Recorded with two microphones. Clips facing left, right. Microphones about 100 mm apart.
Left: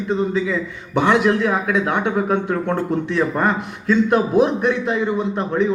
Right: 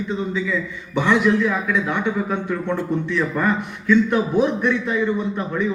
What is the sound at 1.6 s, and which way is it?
A man's voice, 50° left (ahead or behind).